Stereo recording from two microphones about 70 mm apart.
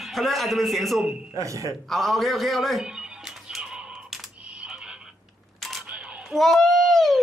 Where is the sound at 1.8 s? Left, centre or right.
Centre.